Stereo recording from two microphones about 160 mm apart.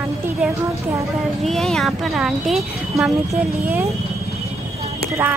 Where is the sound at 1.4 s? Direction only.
Centre (ahead or behind).